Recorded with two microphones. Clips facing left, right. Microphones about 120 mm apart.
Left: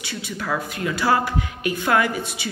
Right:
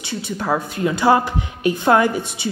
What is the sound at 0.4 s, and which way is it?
A woman's voice, 30° right (ahead or behind).